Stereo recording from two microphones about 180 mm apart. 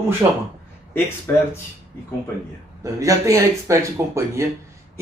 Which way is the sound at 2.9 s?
20° right (ahead or behind).